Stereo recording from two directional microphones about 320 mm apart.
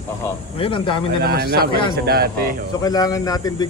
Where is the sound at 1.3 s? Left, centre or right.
Right.